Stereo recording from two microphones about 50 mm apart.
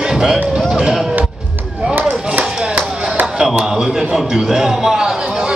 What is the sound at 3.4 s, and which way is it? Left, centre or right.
A man's voice, centre.